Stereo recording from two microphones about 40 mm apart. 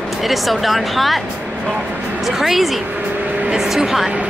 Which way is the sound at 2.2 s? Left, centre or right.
Centre.